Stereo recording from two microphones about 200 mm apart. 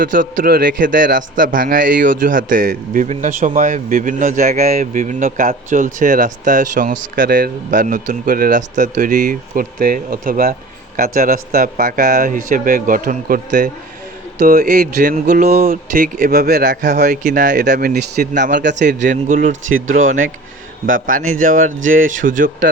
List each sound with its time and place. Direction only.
0.0 s a man's voice: 45° right (ahead or behind); by 18.9 s 60° right (ahead or behind)
18.9 s speech: 40° right (ahead or behind)
20.8 s speech: 40° right (ahead or behind)